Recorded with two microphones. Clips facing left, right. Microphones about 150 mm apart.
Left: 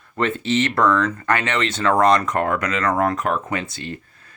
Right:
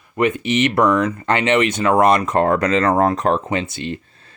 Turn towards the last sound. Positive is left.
turn(degrees=-20)  # may be behind; listen again after turning